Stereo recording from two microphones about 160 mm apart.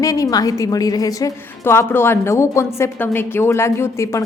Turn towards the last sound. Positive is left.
turn(degrees=15)  # may be behind; listen again after turning